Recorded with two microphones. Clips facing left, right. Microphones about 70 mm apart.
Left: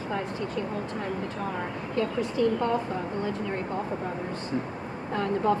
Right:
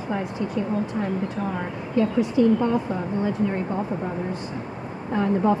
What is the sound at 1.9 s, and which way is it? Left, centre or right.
Speech, centre.